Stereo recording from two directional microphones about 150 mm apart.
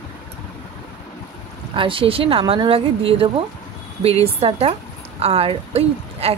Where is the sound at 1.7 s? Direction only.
35° right (ahead or behind).